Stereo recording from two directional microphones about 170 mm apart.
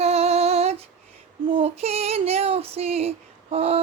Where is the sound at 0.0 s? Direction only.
35° right (ahead or behind).